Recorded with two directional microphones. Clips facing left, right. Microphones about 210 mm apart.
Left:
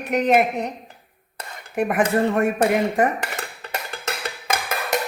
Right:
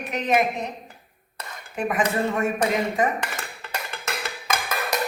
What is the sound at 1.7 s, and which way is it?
A woman's voice, 60° left (ahead or behind).